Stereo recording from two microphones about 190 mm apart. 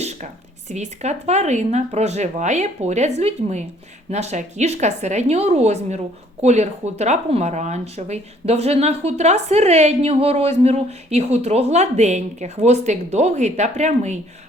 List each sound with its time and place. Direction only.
0.7 s speech: 35° right (ahead or behind)